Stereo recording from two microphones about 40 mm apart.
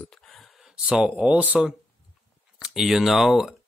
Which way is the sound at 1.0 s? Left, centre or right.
Right.